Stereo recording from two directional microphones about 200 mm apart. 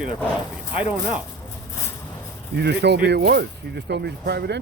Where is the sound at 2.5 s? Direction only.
55° right (ahead or behind).